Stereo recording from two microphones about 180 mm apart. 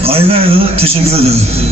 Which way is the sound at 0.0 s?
30° right (ahead or behind).